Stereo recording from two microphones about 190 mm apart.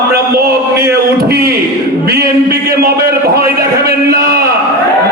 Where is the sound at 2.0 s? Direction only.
55° right (ahead or behind).